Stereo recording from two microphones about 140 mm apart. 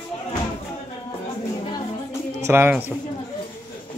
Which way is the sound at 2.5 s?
15° right (ahead or behind).